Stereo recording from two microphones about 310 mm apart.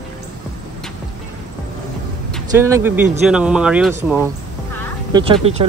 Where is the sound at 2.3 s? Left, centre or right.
Centre.